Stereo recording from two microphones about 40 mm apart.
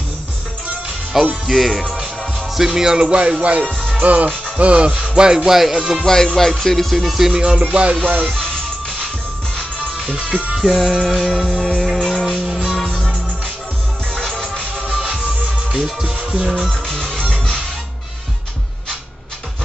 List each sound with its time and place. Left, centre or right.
1.1 s music: centre; by 3.5 s right
3.6 s music: centre
4.0 s music: right
4.9 s music: centre
5.5 s speech: centre
6.0 s speech: centre
7.0 s speech: centre
7.3 s music: centre
7.6 s music: right
8.0 s music: right
10.3 s music: centre
14.1 s music: centre
15.7 s music: centre
16.8 s music: centre